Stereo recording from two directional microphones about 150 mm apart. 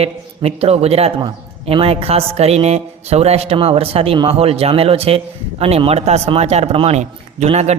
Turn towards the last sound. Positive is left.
turn(degrees=-45)  # may be behind; listen again after turning